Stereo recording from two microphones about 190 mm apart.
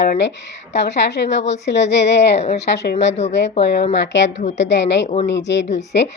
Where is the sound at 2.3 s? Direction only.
35° left (ahead or behind).